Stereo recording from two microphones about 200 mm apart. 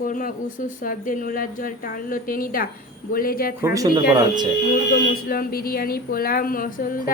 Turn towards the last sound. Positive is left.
turn(degrees=45)  # may be behind; listen again after turning